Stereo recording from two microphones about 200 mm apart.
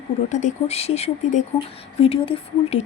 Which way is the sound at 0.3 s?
35° left (ahead or behind).